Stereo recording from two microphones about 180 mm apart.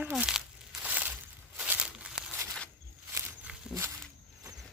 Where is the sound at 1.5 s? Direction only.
5° right (ahead or behind).